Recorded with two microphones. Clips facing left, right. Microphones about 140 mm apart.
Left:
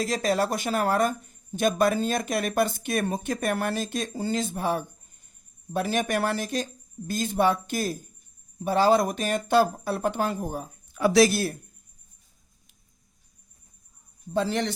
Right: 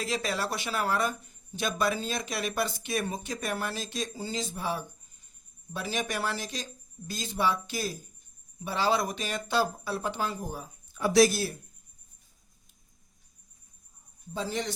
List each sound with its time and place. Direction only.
0.0 s speech: 45° left (ahead or behind)
11.0 s speech: 85° left; by 11.5 s 60° left (ahead or behind)
14.3 s speech: 65° left (ahead or behind)